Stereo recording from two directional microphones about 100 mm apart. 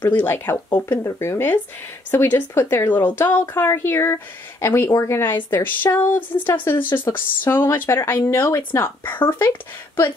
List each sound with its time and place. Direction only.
0.0 s speech: 20° left (ahead or behind)